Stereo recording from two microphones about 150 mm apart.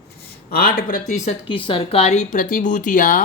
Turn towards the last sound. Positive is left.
turn(degrees=65)  # may be behind; listen again after turning